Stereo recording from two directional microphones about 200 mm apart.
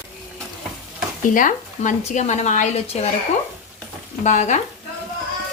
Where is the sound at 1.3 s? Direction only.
40° left (ahead or behind).